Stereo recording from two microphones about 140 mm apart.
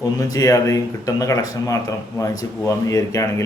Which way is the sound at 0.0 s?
25° left (ahead or behind).